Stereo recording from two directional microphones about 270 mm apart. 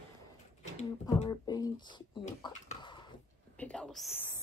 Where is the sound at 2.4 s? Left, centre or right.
Centre.